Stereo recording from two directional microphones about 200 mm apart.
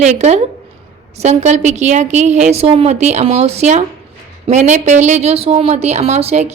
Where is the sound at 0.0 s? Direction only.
35° right (ahead or behind).